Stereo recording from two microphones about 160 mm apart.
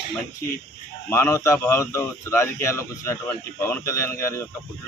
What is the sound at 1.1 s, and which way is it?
A man's voice, 15° left (ahead or behind).